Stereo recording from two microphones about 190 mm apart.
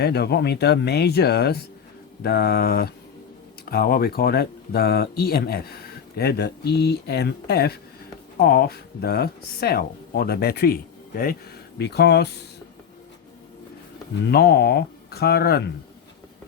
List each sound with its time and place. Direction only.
0.0 s speech: 60° left (ahead or behind)
11.8 s speech: 60° left (ahead or behind)
14.3 s speech: 55° left (ahead or behind)